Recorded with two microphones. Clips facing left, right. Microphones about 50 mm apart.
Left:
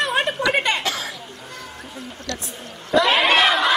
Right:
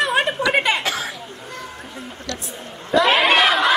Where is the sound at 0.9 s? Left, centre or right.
Centre.